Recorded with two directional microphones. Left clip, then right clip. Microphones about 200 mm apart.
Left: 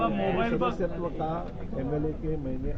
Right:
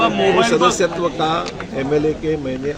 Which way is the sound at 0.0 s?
5° right (ahead or behind).